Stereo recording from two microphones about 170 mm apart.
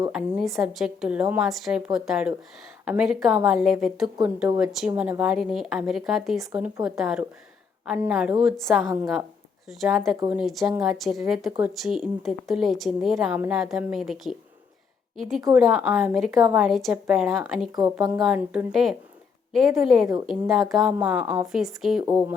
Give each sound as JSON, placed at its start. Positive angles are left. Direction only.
{"t": 0.1, "sound": "a woman's voice", "side_deg": 0}
{"t": 17.7, "sound": "speech", "side_deg": -20}
{"t": 18.0, "sound": "a woman's voice", "side_deg": 0}